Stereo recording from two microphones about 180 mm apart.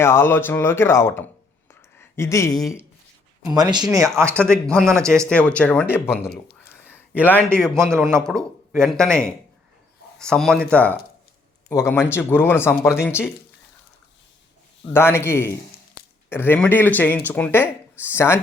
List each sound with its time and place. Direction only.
0.0 s speech: 15° left (ahead or behind)
2.6 s speech: centre (ahead or behind)
3.4 s speech: 20° right (ahead or behind)
4.3 s speech: 5° left (ahead or behind)
4.9 s a man's voice: 15° right (ahead or behind)
5.3 s speech: 5° left (ahead or behind)
6.5 s a sound: 10° left (ahead or behind)
7.2 s speech: 10° left (ahead or behind)
14.9 s speech: 15° left (ahead or behind)